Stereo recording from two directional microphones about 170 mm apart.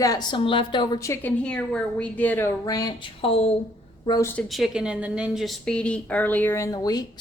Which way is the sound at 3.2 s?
35° left (ahead or behind).